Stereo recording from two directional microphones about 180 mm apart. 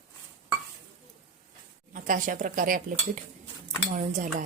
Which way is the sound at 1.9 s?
50° right (ahead or behind).